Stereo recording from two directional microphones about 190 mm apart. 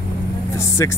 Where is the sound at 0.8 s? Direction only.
15° left (ahead or behind).